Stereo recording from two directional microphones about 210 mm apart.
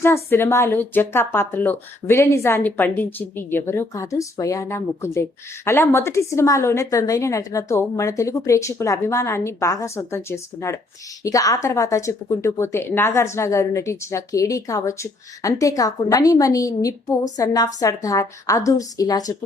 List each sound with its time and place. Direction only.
0.0 s speech: 10° left (ahead or behind)